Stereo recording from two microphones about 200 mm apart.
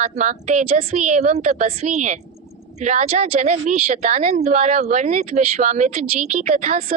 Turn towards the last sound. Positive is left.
turn(degrees=-30)  # may be behind; listen again after turning